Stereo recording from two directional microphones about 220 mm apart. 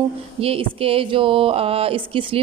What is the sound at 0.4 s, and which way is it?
Speech, 25° right (ahead or behind).